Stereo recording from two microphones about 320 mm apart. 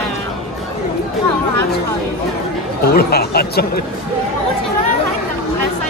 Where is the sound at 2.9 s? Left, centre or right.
Left.